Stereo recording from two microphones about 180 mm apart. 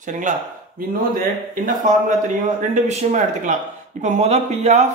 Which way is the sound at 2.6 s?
40° right (ahead or behind).